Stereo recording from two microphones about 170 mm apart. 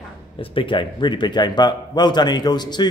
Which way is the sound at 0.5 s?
30° left (ahead or behind).